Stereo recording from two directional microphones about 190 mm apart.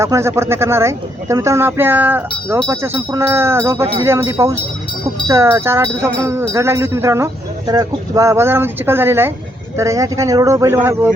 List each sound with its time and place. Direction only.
0.0 s speech: 15° right (ahead or behind)